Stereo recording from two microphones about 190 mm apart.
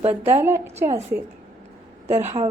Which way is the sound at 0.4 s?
10° right (ahead or behind).